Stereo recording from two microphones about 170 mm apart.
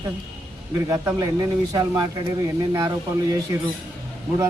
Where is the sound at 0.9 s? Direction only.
20° right (ahead or behind).